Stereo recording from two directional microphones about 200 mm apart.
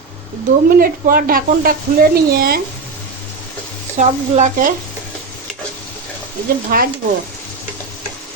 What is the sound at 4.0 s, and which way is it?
Speech, 35° right (ahead or behind).